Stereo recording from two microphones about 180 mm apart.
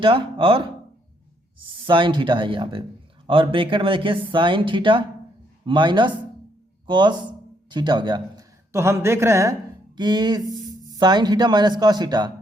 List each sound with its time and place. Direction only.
0.0 s speech: 30° right (ahead or behind)